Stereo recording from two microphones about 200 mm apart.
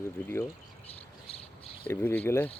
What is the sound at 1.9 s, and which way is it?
Speech, 10° left (ahead or behind).